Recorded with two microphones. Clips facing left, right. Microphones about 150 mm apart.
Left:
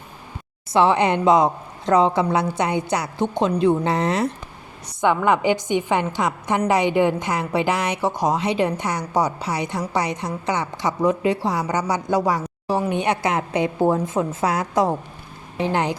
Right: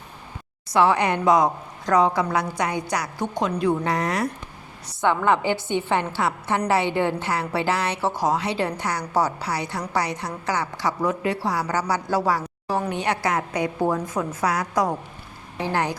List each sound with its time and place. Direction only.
0.7 s a woman's voice: 25° left (ahead or behind)